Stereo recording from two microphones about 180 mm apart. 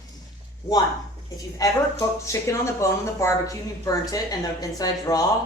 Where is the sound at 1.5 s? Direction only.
20° left (ahead or behind).